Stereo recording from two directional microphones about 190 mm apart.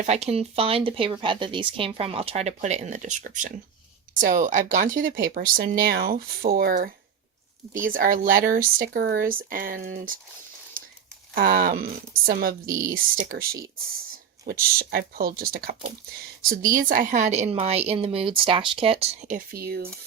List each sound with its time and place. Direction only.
0.0 s a woman's voice: 35° right (ahead or behind); by 10.2 s 50° right (ahead or behind)
11.3 s speech: 50° right (ahead or behind)
12.6 s speech: 15° right (ahead or behind)
12.9 s a woman's voice: 45° right (ahead or behind)
19.5 s speech: 55° right (ahead or behind)